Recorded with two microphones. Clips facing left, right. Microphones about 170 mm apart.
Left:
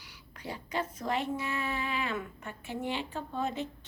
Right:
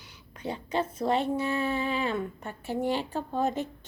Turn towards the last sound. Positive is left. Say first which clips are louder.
# right 5 dB
turn(degrees=-40)  # may be behind; listen again after turning